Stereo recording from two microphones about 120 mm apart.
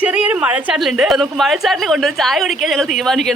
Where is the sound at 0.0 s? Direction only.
10° right (ahead or behind).